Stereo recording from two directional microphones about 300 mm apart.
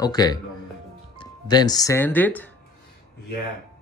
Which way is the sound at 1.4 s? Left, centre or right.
Centre.